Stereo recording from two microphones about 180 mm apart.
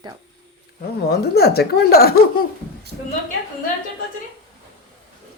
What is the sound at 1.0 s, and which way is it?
Speech, 60° left (ahead or behind).